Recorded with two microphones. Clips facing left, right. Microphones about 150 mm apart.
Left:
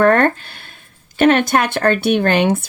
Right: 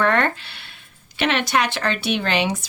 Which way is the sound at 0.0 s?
45° left (ahead or behind).